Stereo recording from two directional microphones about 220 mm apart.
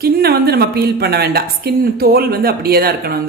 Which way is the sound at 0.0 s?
45° right (ahead or behind).